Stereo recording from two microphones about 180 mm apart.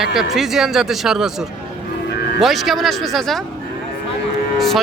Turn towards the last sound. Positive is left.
turn(degrees=0)  # may be behind; listen again after turning